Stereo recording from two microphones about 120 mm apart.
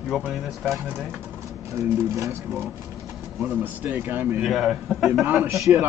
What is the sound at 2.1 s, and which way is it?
Speech, 25° right (ahead or behind).